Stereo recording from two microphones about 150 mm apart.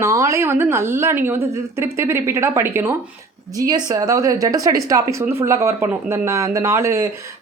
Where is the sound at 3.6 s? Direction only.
25° right (ahead or behind).